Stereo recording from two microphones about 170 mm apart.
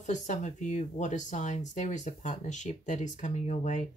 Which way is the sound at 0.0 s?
45° left (ahead or behind).